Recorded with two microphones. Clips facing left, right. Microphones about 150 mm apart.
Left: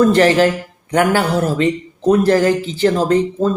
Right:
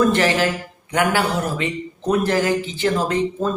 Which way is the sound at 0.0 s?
40° left (ahead or behind).